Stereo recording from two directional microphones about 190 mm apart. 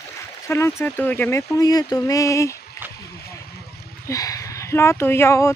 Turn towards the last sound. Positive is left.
turn(degrees=15)  # may be behind; listen again after turning